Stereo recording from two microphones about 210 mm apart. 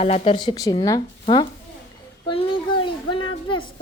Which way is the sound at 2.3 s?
25° left (ahead or behind).